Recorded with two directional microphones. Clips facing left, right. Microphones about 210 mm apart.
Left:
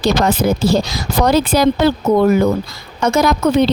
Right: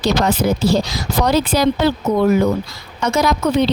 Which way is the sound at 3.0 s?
50° left (ahead or behind).